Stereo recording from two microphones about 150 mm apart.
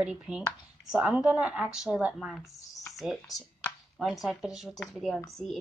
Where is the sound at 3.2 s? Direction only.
Centre (ahead or behind).